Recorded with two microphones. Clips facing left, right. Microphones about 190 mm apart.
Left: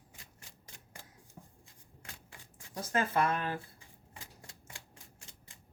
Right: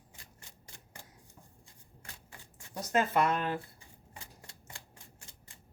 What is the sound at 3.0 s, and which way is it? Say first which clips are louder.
Speech: right 2 dB; 20° right (ahead or behind).